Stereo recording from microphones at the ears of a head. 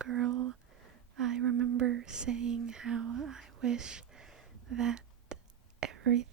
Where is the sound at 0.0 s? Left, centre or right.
Right.